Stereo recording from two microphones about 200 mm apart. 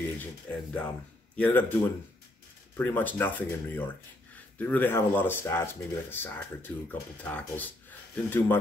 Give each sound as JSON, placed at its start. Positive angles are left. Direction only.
{"t": 0.2, "sound": "speech", "side_deg": 5}
{"t": 2.8, "sound": "speech", "side_deg": 10}